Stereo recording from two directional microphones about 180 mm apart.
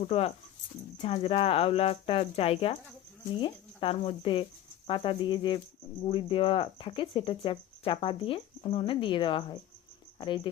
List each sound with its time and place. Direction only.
0.0 s speech: 35° left (ahead or behind)